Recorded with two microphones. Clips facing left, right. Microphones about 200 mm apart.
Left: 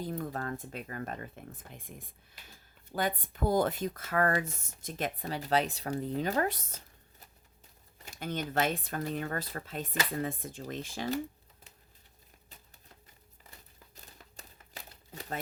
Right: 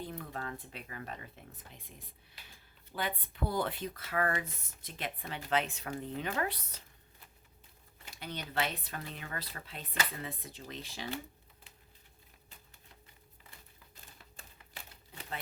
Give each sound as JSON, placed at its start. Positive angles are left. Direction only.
{"t": 0.0, "sound": "speech", "side_deg": 40}
{"t": 7.9, "sound": "speech", "side_deg": 45}
{"t": 13.9, "sound": "typewriter", "side_deg": 40}